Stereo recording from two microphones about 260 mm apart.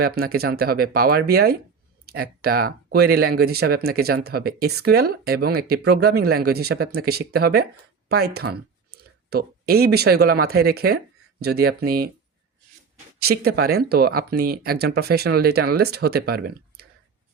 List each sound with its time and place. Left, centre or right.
0.0 s speech: right
13.1 s speech: right